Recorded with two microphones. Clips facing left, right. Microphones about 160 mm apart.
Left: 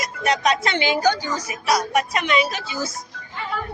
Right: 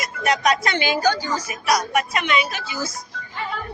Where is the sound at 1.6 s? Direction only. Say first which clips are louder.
Left 1 dB; 30° left (ahead or behind).